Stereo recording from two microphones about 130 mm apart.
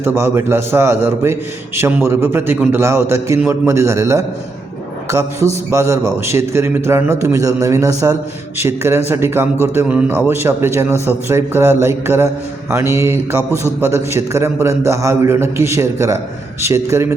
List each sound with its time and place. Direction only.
0.0 s a man's voice: 20° right (ahead or behind)
5.7 s a man's voice: 25° right (ahead or behind)